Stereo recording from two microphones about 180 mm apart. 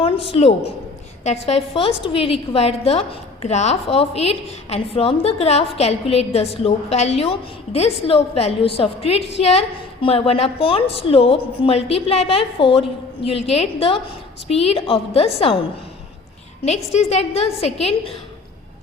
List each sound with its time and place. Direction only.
0.3 s a woman's voice: 35° left (ahead or behind)
16.6 s a woman's voice: 40° left (ahead or behind)